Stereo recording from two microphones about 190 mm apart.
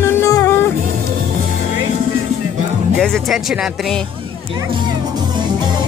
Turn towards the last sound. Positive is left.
turn(degrees=0)  # may be behind; listen again after turning